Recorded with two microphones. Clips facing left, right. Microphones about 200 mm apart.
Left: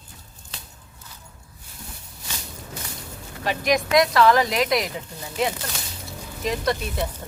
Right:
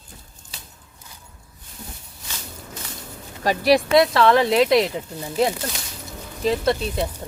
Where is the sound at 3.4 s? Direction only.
35° right (ahead or behind).